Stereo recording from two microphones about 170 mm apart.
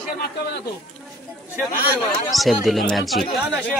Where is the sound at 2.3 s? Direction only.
Centre (ahead or behind).